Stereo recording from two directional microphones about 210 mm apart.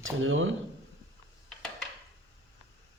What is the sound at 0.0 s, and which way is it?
Speech, 70° right (ahead or behind).